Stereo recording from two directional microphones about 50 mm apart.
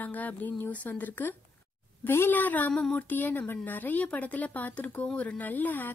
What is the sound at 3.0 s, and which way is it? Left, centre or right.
Speech, left.